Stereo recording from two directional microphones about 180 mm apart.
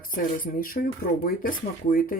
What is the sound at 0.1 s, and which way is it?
Speech, 50° left (ahead or behind).